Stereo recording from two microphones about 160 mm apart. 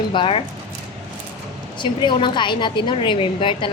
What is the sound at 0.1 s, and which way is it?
Speech, 35° left (ahead or behind).